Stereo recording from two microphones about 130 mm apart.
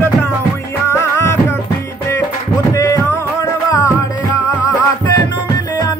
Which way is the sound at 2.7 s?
25° left (ahead or behind).